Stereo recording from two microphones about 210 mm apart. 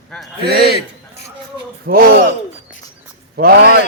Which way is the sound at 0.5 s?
50° right (ahead or behind).